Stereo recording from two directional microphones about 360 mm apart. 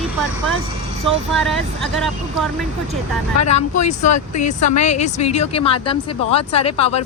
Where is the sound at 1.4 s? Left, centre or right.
Centre.